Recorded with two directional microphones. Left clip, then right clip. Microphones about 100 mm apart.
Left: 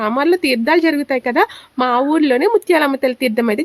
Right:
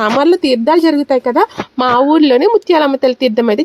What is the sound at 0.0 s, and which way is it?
A woman's voice, 35° right (ahead or behind).